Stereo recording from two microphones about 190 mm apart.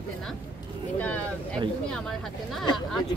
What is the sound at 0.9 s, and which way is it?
Speech, 10° left (ahead or behind).